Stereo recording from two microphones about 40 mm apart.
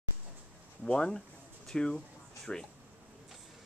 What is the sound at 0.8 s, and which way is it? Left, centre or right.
Speech, left.